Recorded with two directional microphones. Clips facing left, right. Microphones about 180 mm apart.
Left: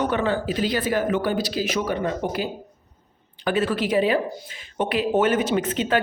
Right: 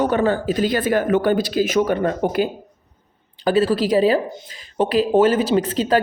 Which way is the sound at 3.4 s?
35° right (ahead or behind).